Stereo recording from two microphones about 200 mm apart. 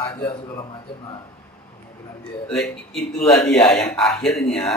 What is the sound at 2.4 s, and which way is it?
Speech, 5° left (ahead or behind).